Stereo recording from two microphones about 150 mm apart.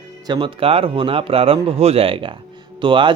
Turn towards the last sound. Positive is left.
turn(degrees=-35)  # may be behind; listen again after turning